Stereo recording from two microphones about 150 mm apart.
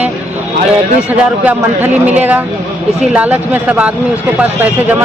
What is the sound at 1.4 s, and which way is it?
Speech, 10° right (ahead or behind).